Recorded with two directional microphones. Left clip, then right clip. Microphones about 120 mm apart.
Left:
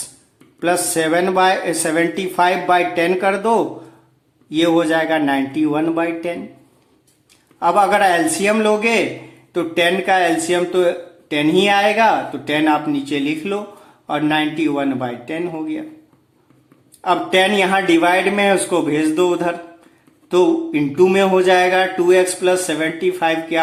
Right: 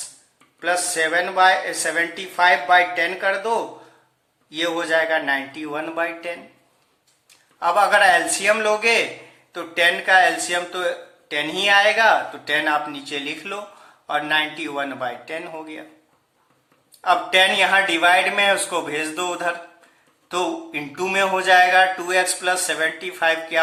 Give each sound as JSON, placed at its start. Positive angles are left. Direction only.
{"t": 0.6, "sound": "speech", "side_deg": 20}
{"t": 4.6, "sound": "speech", "side_deg": 20}
{"t": 4.9, "sound": "speech", "side_deg": 10}
{"t": 7.6, "sound": "speech", "side_deg": 10}
{"t": 10.2, "sound": "speech", "side_deg": 5}
{"t": 17.2, "sound": "speech", "side_deg": 10}